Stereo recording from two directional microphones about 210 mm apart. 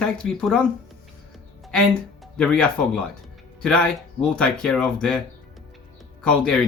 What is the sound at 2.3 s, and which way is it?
Speech, centre (ahead or behind).